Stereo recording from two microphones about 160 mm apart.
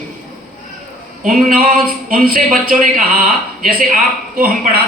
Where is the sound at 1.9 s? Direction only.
65° right (ahead or behind).